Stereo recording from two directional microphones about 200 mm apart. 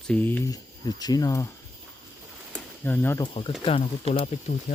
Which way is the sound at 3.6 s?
30° left (ahead or behind).